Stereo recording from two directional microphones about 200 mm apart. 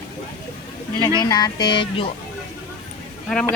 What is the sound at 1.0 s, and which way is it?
Speech, 20° left (ahead or behind).